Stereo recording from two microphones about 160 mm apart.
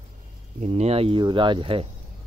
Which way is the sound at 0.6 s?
40° right (ahead or behind).